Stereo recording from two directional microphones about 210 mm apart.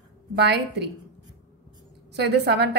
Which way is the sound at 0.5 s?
55° right (ahead or behind).